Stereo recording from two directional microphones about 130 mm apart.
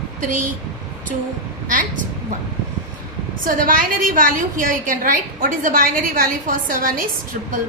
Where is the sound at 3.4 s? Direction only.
90° right.